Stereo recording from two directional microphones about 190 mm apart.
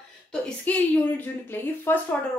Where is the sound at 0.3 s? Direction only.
10° left (ahead or behind).